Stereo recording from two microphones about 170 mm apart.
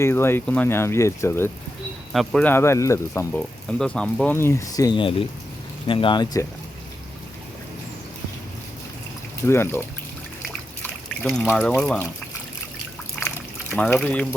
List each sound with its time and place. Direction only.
0.0 s speech: 15° left (ahead or behind)
3.7 s speech: 5° left (ahead or behind); by 6.4 s 25° left (ahead or behind)
9.5 s speech: 15° left (ahead or behind)
11.2 s speech: 10° left (ahead or behind)
13.2 s pour: 10° left (ahead or behind)